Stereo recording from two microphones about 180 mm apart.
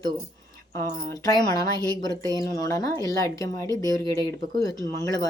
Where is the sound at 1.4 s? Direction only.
20° left (ahead or behind).